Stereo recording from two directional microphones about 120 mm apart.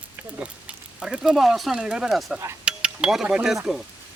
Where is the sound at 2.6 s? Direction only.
10° right (ahead or behind).